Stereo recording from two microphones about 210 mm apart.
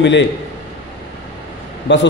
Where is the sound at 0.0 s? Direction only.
60° left (ahead or behind).